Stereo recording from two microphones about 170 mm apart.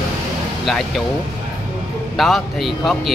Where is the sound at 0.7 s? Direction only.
Centre (ahead or behind).